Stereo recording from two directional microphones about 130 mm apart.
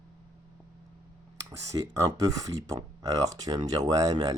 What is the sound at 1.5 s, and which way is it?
Speech, 25° right (ahead or behind).